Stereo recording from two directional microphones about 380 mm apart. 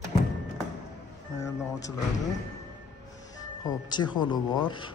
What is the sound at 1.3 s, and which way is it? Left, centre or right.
Speech, centre.